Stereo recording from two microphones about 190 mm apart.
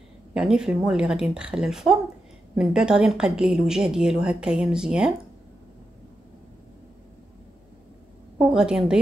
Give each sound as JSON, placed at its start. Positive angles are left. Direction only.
{"t": 0.3, "sound": "speech", "side_deg": -5}
{"t": 8.4, "sound": "speech", "side_deg": -5}